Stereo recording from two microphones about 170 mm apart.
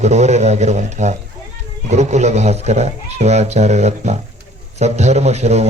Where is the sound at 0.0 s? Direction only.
40° right (ahead or behind).